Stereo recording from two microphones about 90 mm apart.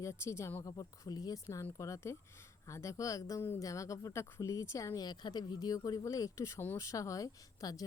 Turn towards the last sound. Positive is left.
turn(degrees=45)  # may be behind; listen again after turning